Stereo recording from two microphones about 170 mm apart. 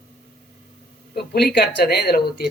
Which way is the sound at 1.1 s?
70° left (ahead or behind).